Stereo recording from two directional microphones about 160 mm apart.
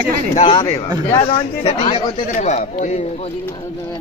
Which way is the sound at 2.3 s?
45° left (ahead or behind).